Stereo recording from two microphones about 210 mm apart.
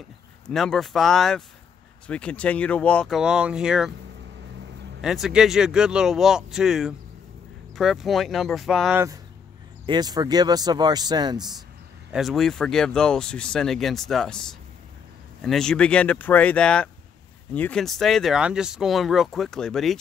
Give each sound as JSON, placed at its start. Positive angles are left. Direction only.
{"t": 0.5, "sound": "speech", "side_deg": 0}
{"t": 5.0, "sound": "speech", "side_deg": 0}
{"t": 9.8, "sound": "speech", "side_deg": -20}
{"t": 12.1, "sound": "speech", "side_deg": 0}